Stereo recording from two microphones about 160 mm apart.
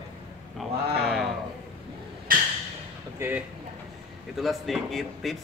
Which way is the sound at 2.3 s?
60° right (ahead or behind).